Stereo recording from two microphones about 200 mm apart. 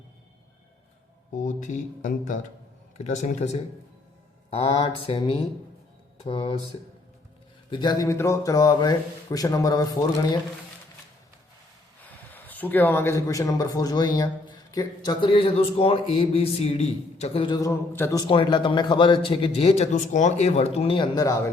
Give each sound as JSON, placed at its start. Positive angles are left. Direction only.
{"t": 1.4, "sound": "speech", "side_deg": 40}
{"t": 7.7, "sound": "a man's voice", "side_deg": 20}
{"t": 12.0, "sound": "speech", "side_deg": 10}